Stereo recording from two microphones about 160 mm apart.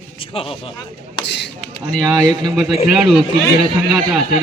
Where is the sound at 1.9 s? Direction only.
5° left (ahead or behind).